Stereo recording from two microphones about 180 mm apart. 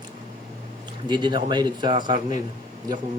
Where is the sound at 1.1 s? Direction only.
25° right (ahead or behind).